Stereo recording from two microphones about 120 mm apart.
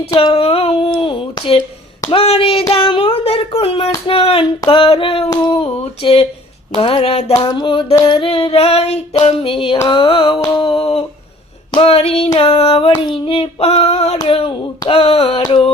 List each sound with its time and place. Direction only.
0.1 s speech: 45° left (ahead or behind)
6.7 s child singing: 55° left (ahead or behind)
7.3 s music: 35° left (ahead or behind)
8.3 s child singing: 55° left (ahead or behind)
9.2 s speech: 50° left (ahead or behind)
11.7 s child singing: 55° left (ahead or behind)
12.4 s speech: 55° left (ahead or behind)
13.0 s child singing: 45° left (ahead or behind); by 14.2 s 65° left (ahead or behind)
14.3 s speech: 50° left (ahead or behind)
15.4 s music: 40° left (ahead or behind)